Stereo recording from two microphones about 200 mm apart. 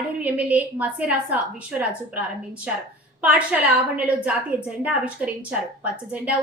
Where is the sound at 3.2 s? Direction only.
5° right (ahead or behind).